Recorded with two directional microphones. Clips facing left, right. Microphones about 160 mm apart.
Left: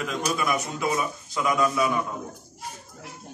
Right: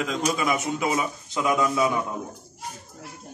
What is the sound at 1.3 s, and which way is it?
Speech, 20° right (ahead or behind).